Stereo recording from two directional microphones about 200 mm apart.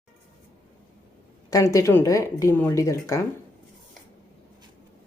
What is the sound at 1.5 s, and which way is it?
Speech, 15° left (ahead or behind).